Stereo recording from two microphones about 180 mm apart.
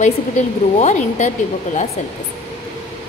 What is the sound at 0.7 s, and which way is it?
Speech, 40° left (ahead or behind).